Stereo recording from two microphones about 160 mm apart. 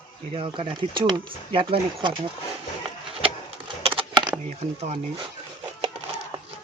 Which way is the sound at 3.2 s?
35° right (ahead or behind).